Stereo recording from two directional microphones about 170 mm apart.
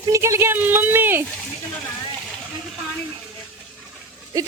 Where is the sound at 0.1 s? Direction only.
15° right (ahead or behind).